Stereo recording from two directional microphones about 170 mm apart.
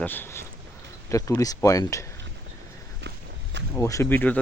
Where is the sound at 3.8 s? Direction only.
15° left (ahead or behind).